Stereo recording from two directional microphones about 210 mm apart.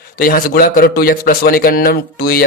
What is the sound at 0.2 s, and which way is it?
Speech, 45° left (ahead or behind).